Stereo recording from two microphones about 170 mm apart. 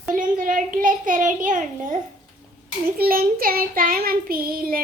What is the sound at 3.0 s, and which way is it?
Child singing, 60° right (ahead or behind).